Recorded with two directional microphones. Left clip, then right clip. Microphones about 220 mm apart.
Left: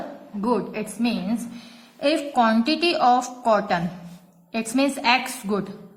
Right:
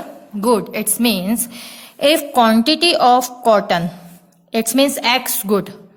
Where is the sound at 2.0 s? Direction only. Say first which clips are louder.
Right 7 dB; 40° right (ahead or behind).